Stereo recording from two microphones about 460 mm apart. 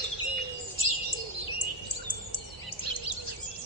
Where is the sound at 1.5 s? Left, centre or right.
Right.